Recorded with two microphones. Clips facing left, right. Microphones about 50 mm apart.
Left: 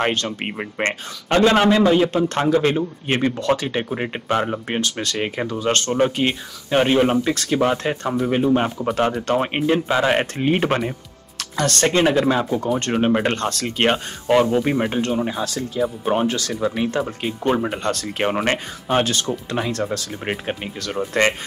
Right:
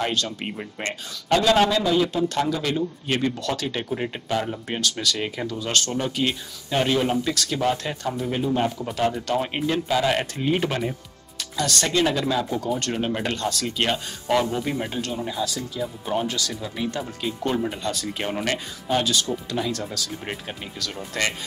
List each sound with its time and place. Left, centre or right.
0.0 s a man's voice: left